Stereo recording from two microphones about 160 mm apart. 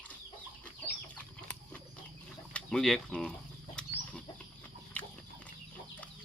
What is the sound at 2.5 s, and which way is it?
Speech, 5° left (ahead or behind).